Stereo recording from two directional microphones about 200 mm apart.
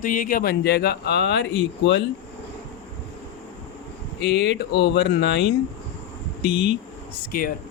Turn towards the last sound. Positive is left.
turn(degrees=50)  # may be behind; listen again after turning